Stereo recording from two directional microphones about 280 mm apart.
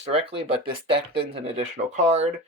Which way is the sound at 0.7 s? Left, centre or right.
Centre.